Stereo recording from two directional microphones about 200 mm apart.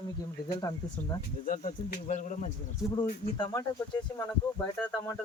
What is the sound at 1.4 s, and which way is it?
Speech, 40° left (ahead or behind).